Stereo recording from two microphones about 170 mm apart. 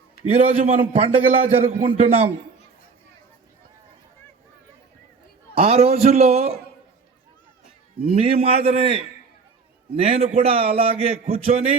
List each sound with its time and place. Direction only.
0.3 s a man's voice: 40° right (ahead or behind)
5.5 s a man's voice: 35° right (ahead or behind)
8.0 s a man's voice: 35° right (ahead or behind)